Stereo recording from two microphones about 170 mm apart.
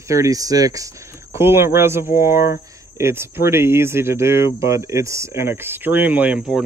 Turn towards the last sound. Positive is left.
turn(degrees=-5)  # may be behind; listen again after turning